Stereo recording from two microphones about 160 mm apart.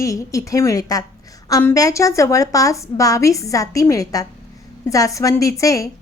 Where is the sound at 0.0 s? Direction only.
20° left (ahead or behind).